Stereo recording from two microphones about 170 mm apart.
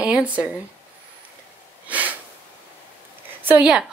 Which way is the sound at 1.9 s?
10° right (ahead or behind).